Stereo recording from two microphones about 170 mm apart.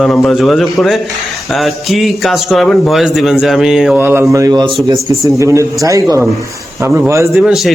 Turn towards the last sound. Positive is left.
turn(degrees=-10)  # may be behind; listen again after turning